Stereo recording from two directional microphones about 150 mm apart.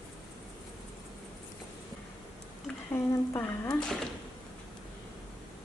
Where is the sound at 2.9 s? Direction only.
15° left (ahead or behind).